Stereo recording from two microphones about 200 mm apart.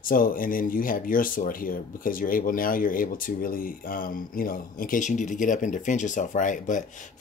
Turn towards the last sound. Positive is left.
turn(degrees=40)  # may be behind; listen again after turning